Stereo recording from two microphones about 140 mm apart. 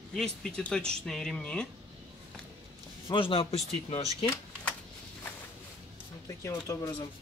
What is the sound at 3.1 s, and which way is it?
Speech, 35° left (ahead or behind).